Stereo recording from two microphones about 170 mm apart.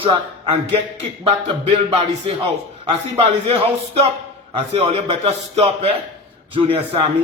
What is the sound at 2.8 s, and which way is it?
A man's voice, 35° right (ahead or behind).